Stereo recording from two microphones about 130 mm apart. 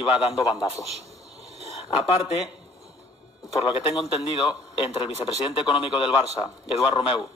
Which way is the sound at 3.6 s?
45° left (ahead or behind).